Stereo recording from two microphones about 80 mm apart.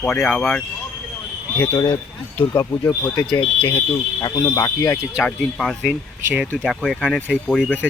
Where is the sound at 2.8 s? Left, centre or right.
Left.